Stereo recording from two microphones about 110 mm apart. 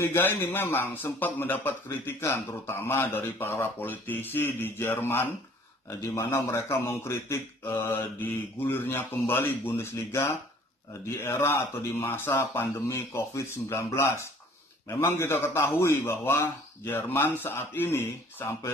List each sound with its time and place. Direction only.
0.0 s a man's voice: 25° left (ahead or behind)